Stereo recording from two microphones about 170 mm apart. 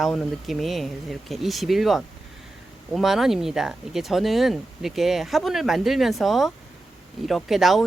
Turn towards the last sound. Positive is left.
turn(degrees=0)  # may be behind; listen again after turning